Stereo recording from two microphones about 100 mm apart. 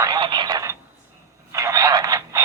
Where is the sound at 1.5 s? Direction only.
35° right (ahead or behind).